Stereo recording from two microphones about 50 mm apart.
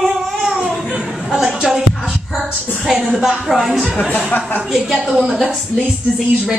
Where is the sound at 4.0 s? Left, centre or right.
Left.